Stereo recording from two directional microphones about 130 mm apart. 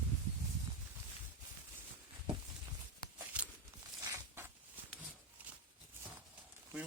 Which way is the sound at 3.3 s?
10° right (ahead or behind).